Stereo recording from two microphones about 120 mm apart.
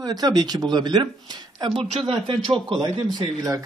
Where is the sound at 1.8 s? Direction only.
50° right (ahead or behind); by 3.6 s 30° right (ahead or behind).